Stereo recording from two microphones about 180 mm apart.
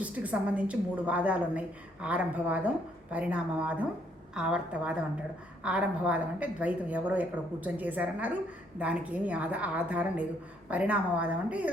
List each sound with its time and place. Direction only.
0.0 s a woman's voice: 10° right (ahead or behind)